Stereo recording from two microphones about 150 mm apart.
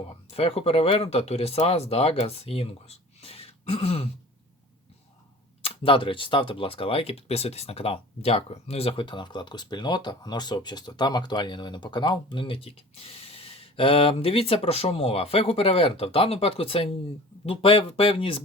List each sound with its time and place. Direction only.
0.3 s speech: 40° left (ahead or behind)
5.6 s speech: 35° left (ahead or behind)